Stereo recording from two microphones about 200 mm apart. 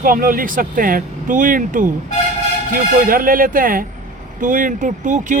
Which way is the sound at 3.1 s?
45° right (ahead or behind).